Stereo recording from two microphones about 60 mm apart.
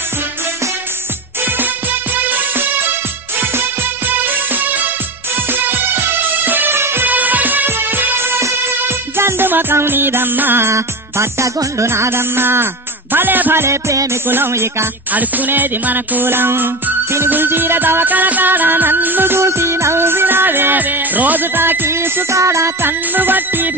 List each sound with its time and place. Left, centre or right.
1.4 s music: right
7.1 s music: right
14.2 s music: right
14.5 s speech: right
15.1 s music: right
22.3 s music: right